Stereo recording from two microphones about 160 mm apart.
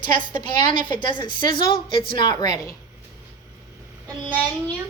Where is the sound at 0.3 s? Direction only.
30° left (ahead or behind).